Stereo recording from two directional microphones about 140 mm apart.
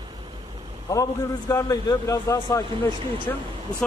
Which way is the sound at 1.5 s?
25° left (ahead or behind).